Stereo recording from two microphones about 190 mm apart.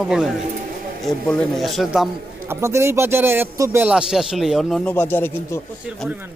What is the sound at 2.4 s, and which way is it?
Speech, 15° right (ahead or behind).